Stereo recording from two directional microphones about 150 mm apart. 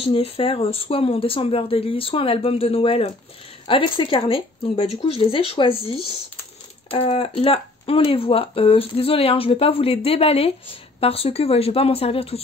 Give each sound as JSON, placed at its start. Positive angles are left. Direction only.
{"t": 0.0, "sound": "speech", "side_deg": 35}